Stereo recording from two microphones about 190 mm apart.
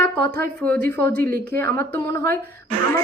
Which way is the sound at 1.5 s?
10° left (ahead or behind).